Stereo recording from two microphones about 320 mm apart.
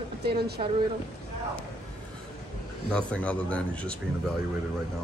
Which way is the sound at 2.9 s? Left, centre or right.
Centre.